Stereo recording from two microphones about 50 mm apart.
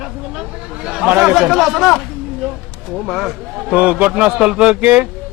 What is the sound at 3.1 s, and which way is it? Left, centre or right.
Speech, centre.